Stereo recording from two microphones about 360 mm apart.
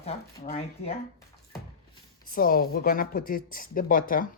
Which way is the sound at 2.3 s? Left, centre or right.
Left.